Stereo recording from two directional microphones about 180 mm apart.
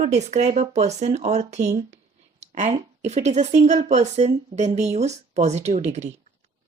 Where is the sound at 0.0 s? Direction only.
40° right (ahead or behind).